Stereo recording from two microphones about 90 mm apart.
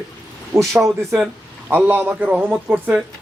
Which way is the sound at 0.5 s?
30° right (ahead or behind).